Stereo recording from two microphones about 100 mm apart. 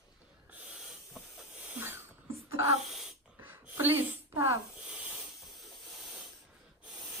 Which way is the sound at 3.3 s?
20° right (ahead or behind).